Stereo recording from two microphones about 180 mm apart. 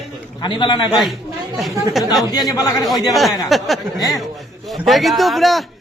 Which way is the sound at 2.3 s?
20° left (ahead or behind).